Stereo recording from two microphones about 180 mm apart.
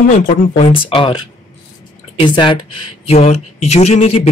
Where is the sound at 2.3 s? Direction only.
25° left (ahead or behind).